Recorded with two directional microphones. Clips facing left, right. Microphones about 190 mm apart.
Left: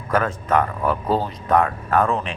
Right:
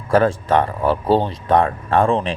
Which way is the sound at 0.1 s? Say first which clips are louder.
Right 5 dB; 30° right (ahead or behind).